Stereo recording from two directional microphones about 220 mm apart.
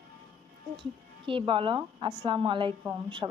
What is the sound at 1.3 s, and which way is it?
A woman's voice, 25° right (ahead or behind).